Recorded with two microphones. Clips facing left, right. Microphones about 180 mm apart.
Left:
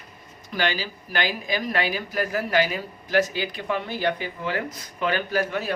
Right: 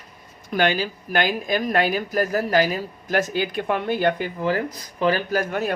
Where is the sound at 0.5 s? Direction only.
50° right (ahead or behind).